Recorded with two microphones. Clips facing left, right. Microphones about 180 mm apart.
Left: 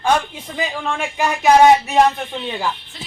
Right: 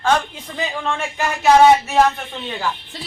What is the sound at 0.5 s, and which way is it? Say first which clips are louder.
A man's voice: left 1 dB; 10° left (ahead or behind).